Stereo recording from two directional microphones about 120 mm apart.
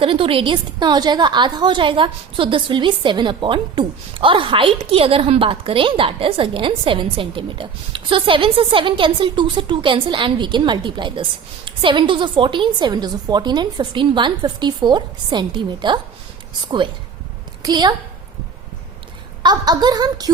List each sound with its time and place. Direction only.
0.0 s a woman's voice: 50° right (ahead or behind)
19.4 s a woman's voice: 35° right (ahead or behind)